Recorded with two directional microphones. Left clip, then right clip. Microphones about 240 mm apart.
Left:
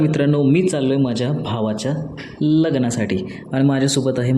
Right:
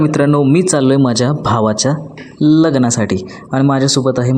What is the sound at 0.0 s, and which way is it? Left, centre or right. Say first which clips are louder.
Speech: right 5 dB; centre.